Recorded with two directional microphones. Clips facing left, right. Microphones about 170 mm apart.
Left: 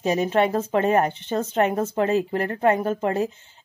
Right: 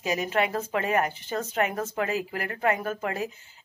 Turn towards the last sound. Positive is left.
turn(degrees=30)  # may be behind; listen again after turning